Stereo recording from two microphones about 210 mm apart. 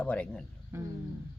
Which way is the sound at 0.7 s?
15° right (ahead or behind).